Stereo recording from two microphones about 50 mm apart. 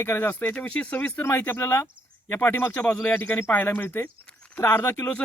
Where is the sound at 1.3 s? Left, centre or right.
Left.